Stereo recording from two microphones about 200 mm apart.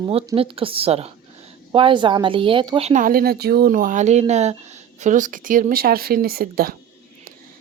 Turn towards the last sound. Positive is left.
turn(degrees=-45)  # may be behind; listen again after turning